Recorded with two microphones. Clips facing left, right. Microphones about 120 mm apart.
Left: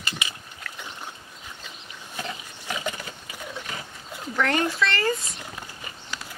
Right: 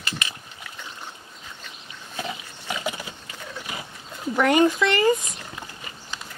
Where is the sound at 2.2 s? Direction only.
10° right (ahead or behind).